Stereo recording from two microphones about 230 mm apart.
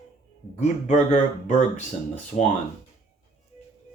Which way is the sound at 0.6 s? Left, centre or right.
Left.